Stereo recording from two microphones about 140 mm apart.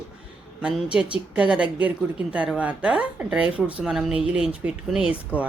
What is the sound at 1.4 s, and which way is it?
Speech, 10° right (ahead or behind).